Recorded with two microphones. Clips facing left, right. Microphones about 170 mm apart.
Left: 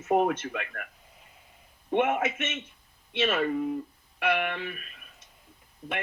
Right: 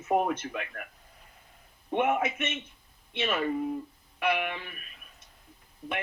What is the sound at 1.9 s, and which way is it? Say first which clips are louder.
Speech: left 1 dB; 50° left (ahead or behind).